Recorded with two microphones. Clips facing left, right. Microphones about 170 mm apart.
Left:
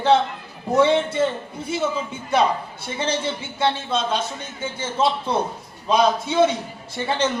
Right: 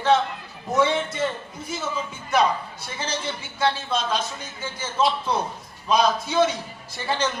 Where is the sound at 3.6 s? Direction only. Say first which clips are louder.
Left 2 dB; 25° left (ahead or behind).